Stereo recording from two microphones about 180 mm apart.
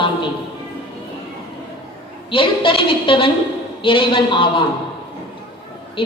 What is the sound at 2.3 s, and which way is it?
A woman's voice, 30° left (ahead or behind).